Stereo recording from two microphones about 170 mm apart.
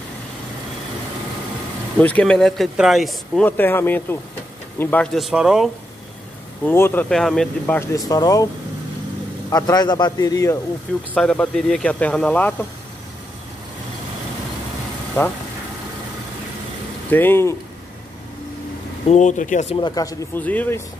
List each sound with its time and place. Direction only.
2.0 s speech: 10° left (ahead or behind)
6.6 s speech: 10° left (ahead or behind)
8.1 s a man's voice: 20° left (ahead or behind)
9.5 s a man's voice: 20° left (ahead or behind)
11.1 s speech: 5° left (ahead or behind)
17.1 s speech: 10° left (ahead or behind)
19.0 s speech: 45° left (ahead or behind)
19.7 s a man's voice: 25° left (ahead or behind)
20.4 s speech: 10° left (ahead or behind)